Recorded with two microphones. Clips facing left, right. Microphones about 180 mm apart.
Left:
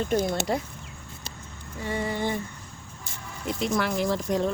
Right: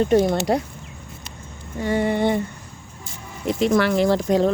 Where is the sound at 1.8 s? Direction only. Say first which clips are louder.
Right 8 dB; 70° right (ahead or behind).